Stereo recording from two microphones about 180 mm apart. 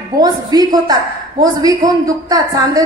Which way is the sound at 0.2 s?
20° right (ahead or behind).